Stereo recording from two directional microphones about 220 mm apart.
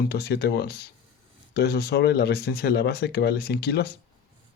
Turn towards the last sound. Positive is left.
turn(degrees=45)  # may be behind; listen again after turning